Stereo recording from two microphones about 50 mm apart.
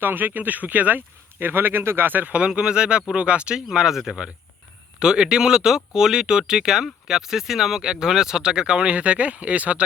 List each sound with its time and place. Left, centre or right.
0.0 s speech: right
2.0 s speech: right
2.5 s speech: centre
3.7 s speech: centre; by 9.8 s right